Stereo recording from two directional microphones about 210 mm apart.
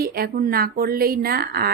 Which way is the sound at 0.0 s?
45° right (ahead or behind).